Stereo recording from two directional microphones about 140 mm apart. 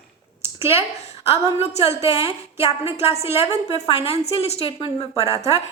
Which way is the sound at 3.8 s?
45° left (ahead or behind).